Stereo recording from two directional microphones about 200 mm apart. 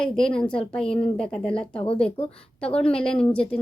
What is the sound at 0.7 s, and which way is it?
Speech, 5° left (ahead or behind).